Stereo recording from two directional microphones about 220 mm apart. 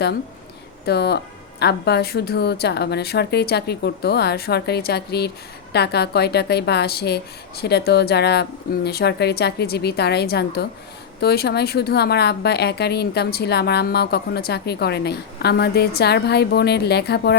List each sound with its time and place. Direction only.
0.9 s speech: 50° left (ahead or behind)